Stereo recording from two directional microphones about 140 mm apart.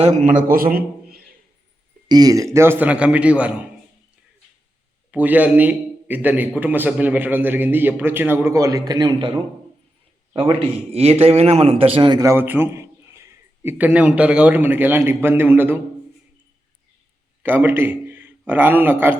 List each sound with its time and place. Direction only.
0.0 s a man's voice: 55° right (ahead or behind); by 1.2 s 90° right
2.0 s a man's voice: 25° right (ahead or behind); by 3.5 s 10° right (ahead or behind)
5.1 s a man's voice: 10° right (ahead or behind); by 9.4 s 35° right (ahead or behind)
10.7 s a man's voice: 45° right (ahead or behind)
12.2 s a man's voice: 15° right (ahead or behind)
17.4 s a man's voice: 15° right (ahead or behind)